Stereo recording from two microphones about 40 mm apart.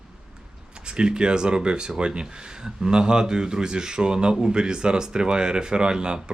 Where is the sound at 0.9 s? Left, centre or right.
Right.